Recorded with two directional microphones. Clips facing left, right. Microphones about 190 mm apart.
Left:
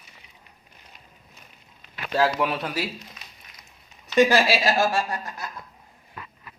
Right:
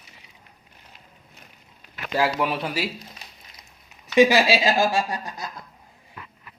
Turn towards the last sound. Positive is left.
turn(degrees=-15)  # may be behind; listen again after turning